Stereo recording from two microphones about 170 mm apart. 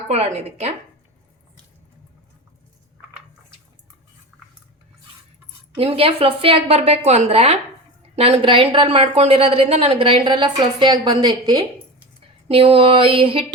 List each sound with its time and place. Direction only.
0.1 s a woman's voice: 40° right (ahead or behind)
5.7 s a woman's voice: 35° right (ahead or behind)
12.5 s a woman's voice: 35° right (ahead or behind)